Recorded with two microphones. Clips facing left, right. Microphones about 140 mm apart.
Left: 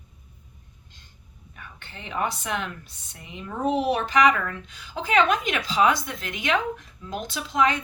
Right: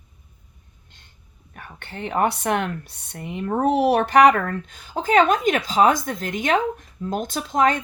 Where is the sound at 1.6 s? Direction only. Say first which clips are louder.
Right 10 dB; 60° right (ahead or behind).